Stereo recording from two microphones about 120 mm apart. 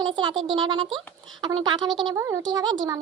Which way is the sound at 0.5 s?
45° right (ahead or behind).